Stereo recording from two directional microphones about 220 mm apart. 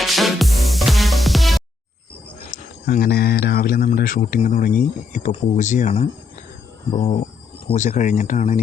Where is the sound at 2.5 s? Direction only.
40° left (ahead or behind).